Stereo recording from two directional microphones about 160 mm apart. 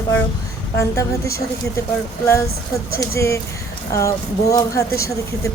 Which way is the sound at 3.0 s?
15° left (ahead or behind).